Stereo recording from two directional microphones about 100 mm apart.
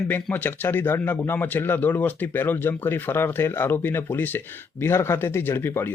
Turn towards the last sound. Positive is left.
turn(degrees=25)  # may be behind; listen again after turning